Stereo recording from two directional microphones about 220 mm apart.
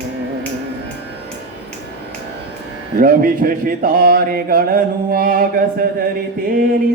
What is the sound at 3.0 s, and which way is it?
Mantra, 40° right (ahead or behind).